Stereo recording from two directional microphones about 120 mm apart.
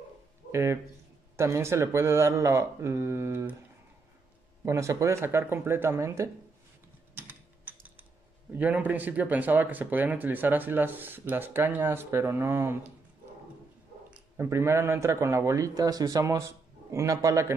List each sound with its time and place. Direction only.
0.5 s a man's voice: 20° right (ahead or behind)
4.6 s a man's voice: 25° right (ahead or behind)
7.2 s tick-tock: 15° right (ahead or behind)
8.5 s speech: 15° right (ahead or behind)
14.3 s a man's voice: 20° right (ahead or behind)